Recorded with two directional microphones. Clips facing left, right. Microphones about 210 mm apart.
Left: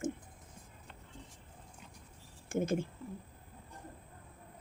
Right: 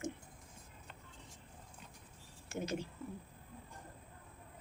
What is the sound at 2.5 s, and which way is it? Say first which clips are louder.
Speech: left 7 dB; 50° left (ahead or behind).